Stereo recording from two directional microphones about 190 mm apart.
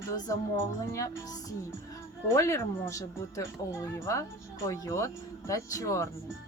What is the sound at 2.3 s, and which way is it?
Speech, 15° left (ahead or behind).